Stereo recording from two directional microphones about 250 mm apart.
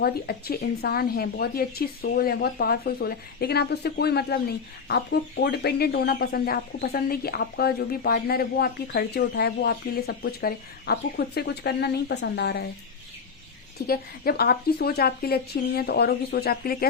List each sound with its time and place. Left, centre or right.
0.0 s speech: left
13.8 s speech: left